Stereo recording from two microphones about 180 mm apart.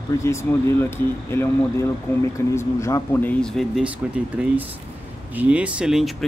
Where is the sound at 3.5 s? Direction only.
Centre (ahead or behind).